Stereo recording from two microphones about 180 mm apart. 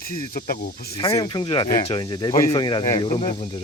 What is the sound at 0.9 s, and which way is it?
Speech, 20° left (ahead or behind).